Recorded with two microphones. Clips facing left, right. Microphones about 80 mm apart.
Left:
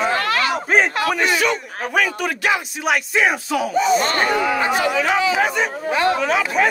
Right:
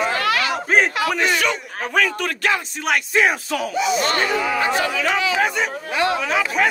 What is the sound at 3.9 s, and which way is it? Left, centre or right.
Speech, left.